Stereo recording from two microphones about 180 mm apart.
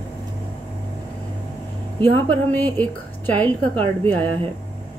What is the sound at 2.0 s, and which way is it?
Speech, 10° left (ahead or behind).